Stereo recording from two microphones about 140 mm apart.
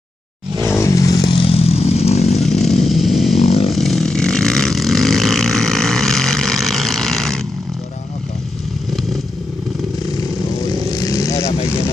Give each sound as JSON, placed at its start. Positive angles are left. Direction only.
{"t": 0.7, "sound": "motorcycle", "side_deg": 20}
{"t": 2.4, "sound": "chainsaw", "side_deg": 0}
{"t": 3.3, "sound": "chainsaw", "side_deg": 45}
{"t": 3.7, "sound": "vehicle", "side_deg": 0}
{"t": 10.6, "sound": "vehicle", "side_deg": 25}